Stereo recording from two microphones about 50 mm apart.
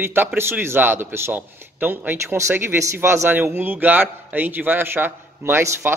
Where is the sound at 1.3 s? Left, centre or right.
Right.